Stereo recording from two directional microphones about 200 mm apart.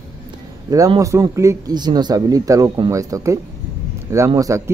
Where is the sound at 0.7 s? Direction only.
15° right (ahead or behind).